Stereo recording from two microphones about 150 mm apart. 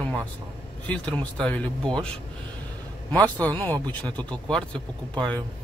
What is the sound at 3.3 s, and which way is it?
Speech, 10° left (ahead or behind).